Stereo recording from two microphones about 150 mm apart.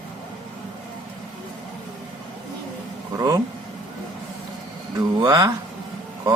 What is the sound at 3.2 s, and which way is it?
Speech, 25° right (ahead or behind).